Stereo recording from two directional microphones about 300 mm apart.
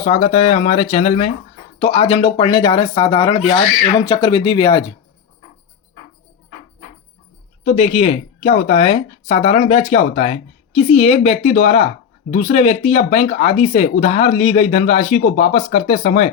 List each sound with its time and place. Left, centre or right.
0.0 s speech: centre
7.6 s speech: left